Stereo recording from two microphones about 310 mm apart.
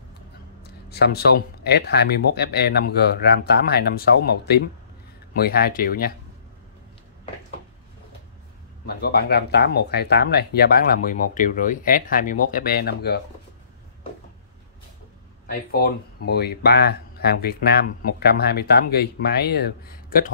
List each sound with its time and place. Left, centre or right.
0.8 s speech: left
8.8 s speech: left
15.7 s speech: left